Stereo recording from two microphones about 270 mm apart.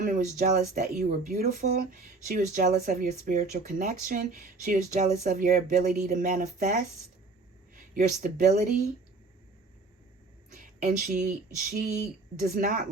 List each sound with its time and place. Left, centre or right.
0.0 s speech: right
7.9 s speech: right
10.6 s speech: right